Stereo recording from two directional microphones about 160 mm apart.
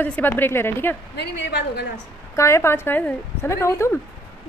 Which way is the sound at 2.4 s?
15° left (ahead or behind).